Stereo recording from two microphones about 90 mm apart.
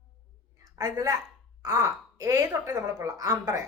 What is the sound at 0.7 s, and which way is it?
A woman's voice, 45° right (ahead or behind).